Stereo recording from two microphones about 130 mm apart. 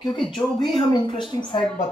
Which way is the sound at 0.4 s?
35° left (ahead or behind).